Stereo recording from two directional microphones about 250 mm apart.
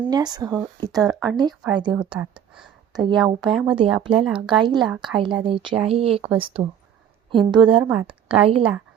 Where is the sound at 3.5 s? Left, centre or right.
Centre.